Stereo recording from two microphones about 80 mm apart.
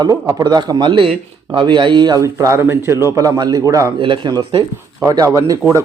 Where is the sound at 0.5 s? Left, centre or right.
Right.